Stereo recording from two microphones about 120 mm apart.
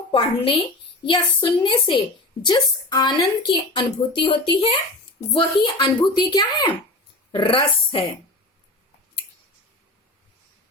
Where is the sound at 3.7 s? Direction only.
45° left (ahead or behind).